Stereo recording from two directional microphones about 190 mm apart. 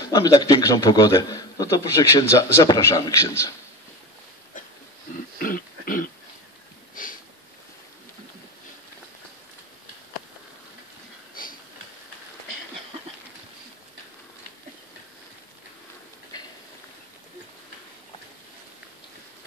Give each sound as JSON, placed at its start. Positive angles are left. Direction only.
{"t": 0.0, "sound": "a man's voice", "side_deg": 20}
{"t": 5.4, "sound": "throat clearing", "side_deg": 50}
{"t": 7.0, "sound": "sniff", "side_deg": 45}